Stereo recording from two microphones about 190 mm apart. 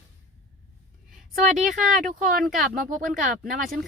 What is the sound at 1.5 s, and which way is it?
Speech, 40° right (ahead or behind).